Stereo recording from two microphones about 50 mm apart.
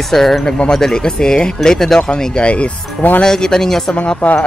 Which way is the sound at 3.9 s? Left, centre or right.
Left.